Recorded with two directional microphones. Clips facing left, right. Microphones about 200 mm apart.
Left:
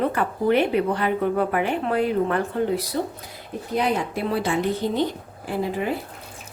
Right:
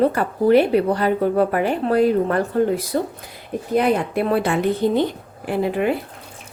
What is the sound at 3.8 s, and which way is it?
Speech, 55° right (ahead or behind).